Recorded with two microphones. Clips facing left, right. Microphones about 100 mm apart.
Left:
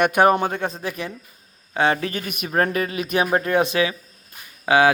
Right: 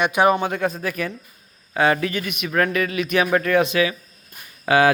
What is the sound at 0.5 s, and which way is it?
A man's voice, 30° left (ahead or behind).